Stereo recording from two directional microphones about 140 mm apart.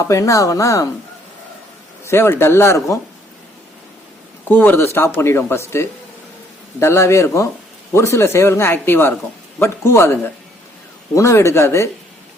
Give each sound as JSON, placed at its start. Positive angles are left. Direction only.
{"t": 0.0, "sound": "a man's voice", "side_deg": 25}
{"t": 2.0, "sound": "a man's voice", "side_deg": 20}
{"t": 4.4, "sound": "a man's voice", "side_deg": 10}